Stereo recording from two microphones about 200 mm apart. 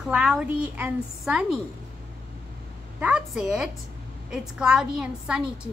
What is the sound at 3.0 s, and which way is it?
A woman's voice, 5° right (ahead or behind).